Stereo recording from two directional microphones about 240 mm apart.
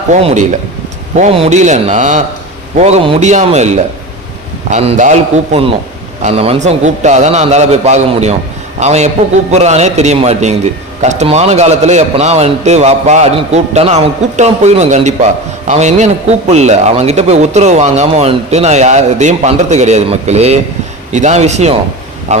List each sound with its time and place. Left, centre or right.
0.1 s a man's voice: right